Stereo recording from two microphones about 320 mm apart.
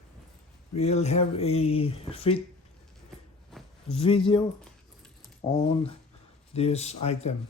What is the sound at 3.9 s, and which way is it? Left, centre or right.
Speech, centre.